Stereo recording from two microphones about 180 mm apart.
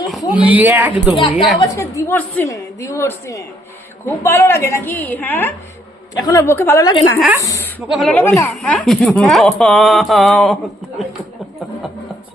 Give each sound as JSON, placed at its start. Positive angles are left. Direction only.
{"t": 0.0, "sound": "speech", "side_deg": 0}
{"t": 1.1, "sound": "a woman's voice", "side_deg": 25}
{"t": 7.8, "sound": "mantra", "side_deg": 0}
{"t": 8.1, "sound": "a woman's voice", "side_deg": 15}
{"t": 9.6, "sound": "mantra", "side_deg": 0}